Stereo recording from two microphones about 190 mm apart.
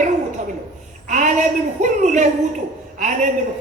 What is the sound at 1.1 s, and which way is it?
A child's voice, 40° right (ahead or behind).